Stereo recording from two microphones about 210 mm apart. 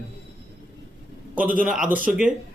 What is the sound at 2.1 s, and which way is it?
Speech, 5° right (ahead or behind).